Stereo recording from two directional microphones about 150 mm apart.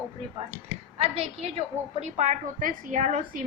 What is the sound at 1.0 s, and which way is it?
A woman's voice, 45° right (ahead or behind).